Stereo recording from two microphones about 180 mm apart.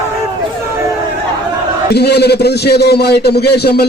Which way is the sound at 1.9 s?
65° left (ahead or behind).